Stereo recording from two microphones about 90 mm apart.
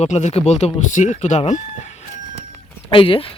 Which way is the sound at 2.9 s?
75° left (ahead or behind).